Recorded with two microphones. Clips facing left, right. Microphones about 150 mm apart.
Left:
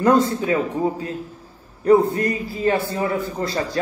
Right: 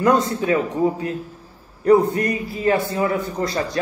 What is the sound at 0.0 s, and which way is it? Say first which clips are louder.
Speech: left 1 dB; 25° left (ahead or behind).